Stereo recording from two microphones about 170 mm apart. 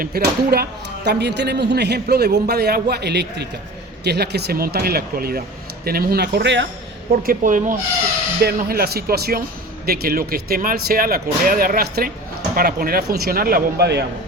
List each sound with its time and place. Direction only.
0.0 s a man's voice: 65° right (ahead or behind); by 6.7 s 90° right
7.1 s speech: 60° right (ahead or behind)
8.4 s speech: 65° right (ahead or behind)